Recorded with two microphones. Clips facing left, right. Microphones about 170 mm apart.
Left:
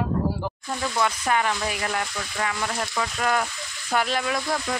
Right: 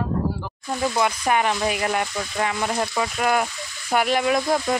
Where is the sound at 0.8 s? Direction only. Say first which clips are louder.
Right 3 dB; 20° right (ahead or behind).